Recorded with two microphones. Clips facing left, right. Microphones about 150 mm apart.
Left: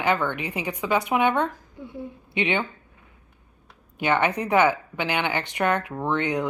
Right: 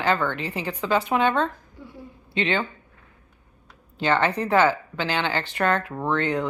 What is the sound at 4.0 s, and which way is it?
A woman's voice, 15° left (ahead or behind).